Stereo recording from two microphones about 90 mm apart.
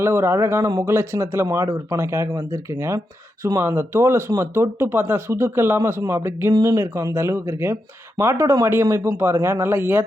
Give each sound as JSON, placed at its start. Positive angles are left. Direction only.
{"t": 0.0, "sound": "speech", "side_deg": -30}
{"t": 6.5, "sound": "speech", "side_deg": -40}